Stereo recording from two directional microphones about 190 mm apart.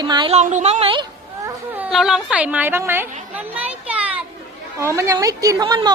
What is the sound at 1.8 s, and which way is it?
A woman's voice, centre (ahead or behind).